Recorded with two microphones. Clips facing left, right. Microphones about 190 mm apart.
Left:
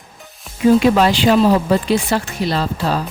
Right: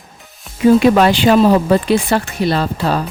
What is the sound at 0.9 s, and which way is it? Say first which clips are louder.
Speech: right 2 dB; 55° right (ahead or behind).